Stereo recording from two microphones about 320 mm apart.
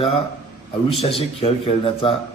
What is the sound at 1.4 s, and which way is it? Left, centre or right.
Speech, centre.